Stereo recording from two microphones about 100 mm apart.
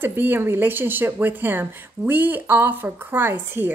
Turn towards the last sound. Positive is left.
turn(degrees=-20)  # may be behind; listen again after turning